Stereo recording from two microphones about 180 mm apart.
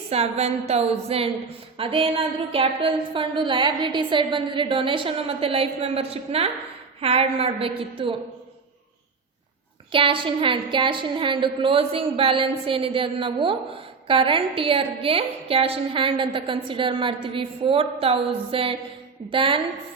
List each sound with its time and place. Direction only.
0.1 s a woman's voice: 35° right (ahead or behind)
9.9 s a woman's voice: 30° right (ahead or behind)